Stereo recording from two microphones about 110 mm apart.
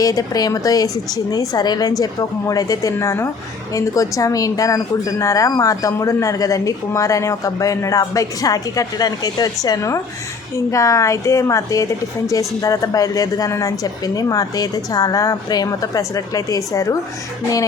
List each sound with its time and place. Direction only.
0.0 s a woman's voice: 35° left (ahead or behind)